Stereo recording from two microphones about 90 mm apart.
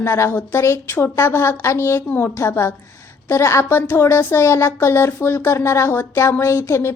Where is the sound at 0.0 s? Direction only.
25° left (ahead or behind).